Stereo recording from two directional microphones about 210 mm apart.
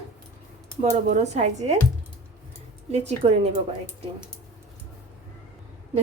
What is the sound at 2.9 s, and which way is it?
Speech, 30° right (ahead or behind).